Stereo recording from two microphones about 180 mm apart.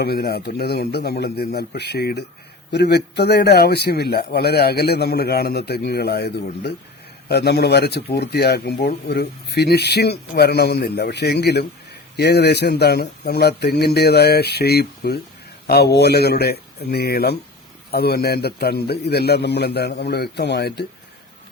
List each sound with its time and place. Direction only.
0.0 s speech: 60° left (ahead or behind)